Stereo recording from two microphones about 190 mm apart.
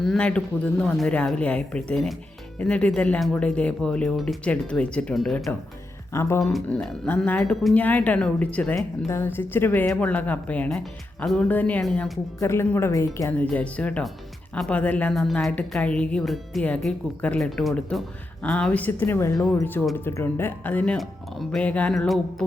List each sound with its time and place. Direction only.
0.0 s a woman's voice: 5° left (ahead or behind)
6.1 s speech: 15° left (ahead or behind)
12.4 s a woman's voice: 15° left (ahead or behind)